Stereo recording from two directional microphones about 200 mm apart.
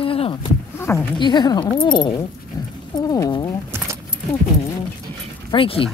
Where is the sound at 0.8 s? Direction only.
10° left (ahead or behind).